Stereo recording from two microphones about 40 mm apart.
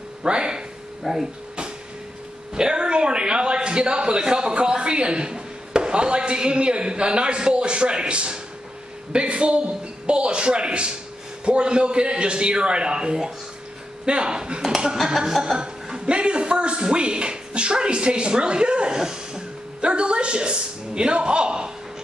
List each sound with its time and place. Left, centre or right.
0.2 s a man's voice: right
1.0 s speech: centre
2.5 s a man's voice: right